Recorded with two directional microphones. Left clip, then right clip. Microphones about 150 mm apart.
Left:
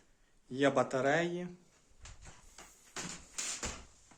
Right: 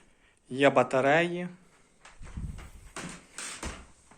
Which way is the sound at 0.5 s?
Centre (ahead or behind).